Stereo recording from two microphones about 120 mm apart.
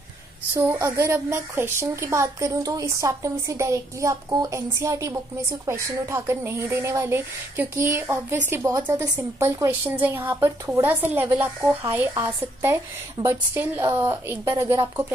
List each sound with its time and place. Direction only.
0.6 s a woman's voice: 25° right (ahead or behind)
8.9 s a woman's voice: 30° right (ahead or behind)
9.7 s a woman's voice: 15° right (ahead or behind)